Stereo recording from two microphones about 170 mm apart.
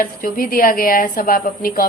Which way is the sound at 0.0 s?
55° left (ahead or behind).